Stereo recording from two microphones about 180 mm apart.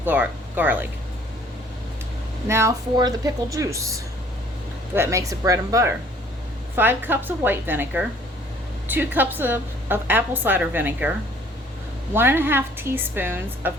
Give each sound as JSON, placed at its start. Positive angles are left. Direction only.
{"t": 0.0, "sound": "speech", "side_deg": -10}
{"t": 2.5, "sound": "a woman's voice", "side_deg": -15}
{"t": 12.1, "sound": "a woman's voice", "side_deg": -10}